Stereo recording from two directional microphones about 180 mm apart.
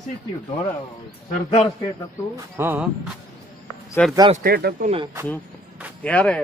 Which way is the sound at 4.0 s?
5° left (ahead or behind).